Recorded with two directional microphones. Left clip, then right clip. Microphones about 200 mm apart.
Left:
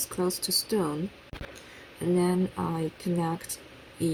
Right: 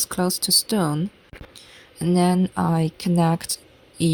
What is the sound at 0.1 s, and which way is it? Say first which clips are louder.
Speech: right 6 dB; 40° right (ahead or behind).